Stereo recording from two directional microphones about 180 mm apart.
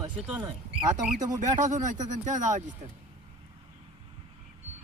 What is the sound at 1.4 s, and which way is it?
A man's voice, 45° right (ahead or behind).